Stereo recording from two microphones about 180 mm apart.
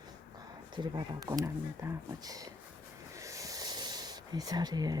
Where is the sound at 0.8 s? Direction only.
25° right (ahead or behind).